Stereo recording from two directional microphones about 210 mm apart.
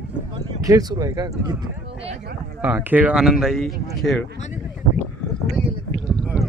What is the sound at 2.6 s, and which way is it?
Speech, 10° right (ahead or behind).